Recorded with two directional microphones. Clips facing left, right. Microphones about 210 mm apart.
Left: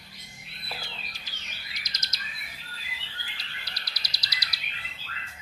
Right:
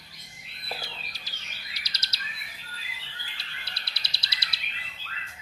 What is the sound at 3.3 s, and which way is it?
Bird, 30° right (ahead or behind).